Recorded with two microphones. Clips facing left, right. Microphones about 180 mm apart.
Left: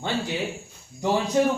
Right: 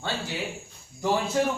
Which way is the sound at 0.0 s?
20° left (ahead or behind).